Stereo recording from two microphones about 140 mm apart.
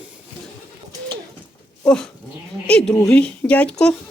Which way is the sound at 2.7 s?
5° left (ahead or behind).